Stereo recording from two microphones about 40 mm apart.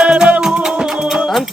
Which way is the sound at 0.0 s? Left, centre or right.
Right.